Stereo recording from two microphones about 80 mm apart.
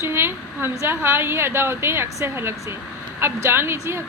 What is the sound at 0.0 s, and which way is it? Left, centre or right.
A woman's voice, right.